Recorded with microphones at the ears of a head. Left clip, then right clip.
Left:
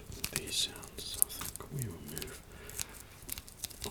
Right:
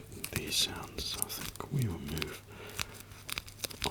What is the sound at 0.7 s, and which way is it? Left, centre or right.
Whispering, right.